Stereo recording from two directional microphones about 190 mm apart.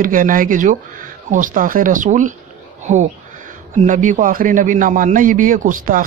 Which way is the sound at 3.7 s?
40° right (ahead or behind).